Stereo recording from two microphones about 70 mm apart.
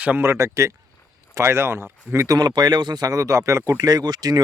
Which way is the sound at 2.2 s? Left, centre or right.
Right.